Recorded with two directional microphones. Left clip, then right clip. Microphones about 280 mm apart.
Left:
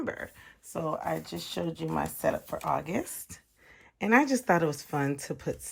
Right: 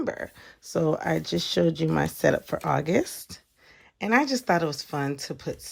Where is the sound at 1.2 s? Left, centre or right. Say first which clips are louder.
Right 10 dB; right.